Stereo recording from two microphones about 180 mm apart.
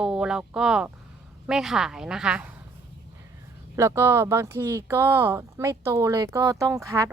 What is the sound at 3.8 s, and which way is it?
Speech, 15° right (ahead or behind).